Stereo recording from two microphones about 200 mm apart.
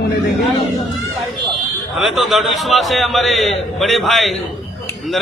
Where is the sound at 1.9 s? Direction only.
Centre (ahead or behind).